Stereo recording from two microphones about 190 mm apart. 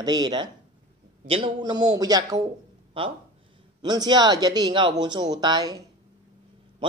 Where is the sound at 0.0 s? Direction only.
20° right (ahead or behind).